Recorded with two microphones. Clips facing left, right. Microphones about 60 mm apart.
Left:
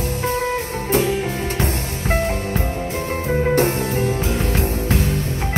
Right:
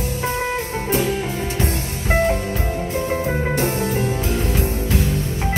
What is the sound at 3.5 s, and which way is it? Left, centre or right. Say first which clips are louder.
Music: left 2 dB; left.